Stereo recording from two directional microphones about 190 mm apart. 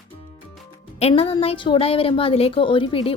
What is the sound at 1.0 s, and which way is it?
A woman's voice, 35° left (ahead or behind).